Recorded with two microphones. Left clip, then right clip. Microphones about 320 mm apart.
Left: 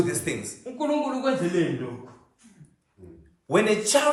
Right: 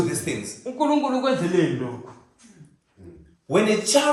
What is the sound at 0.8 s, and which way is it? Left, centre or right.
Speech, centre.